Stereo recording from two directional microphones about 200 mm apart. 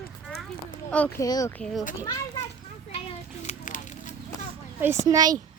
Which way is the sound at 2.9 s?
30° left (ahead or behind).